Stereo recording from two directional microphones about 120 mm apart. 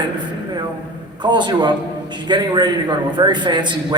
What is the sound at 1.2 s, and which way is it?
A man's voice, 40° right (ahead or behind).